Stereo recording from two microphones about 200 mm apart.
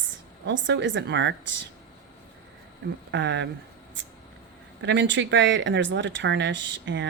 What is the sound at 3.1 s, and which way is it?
Speech, 65° right (ahead or behind).